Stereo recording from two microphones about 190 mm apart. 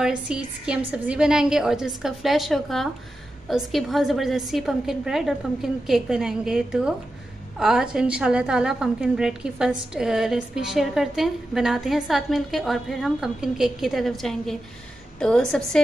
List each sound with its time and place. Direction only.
0.0 s a woman's voice: 5° right (ahead or behind)